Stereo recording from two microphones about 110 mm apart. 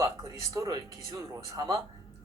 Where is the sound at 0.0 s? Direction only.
30° right (ahead or behind).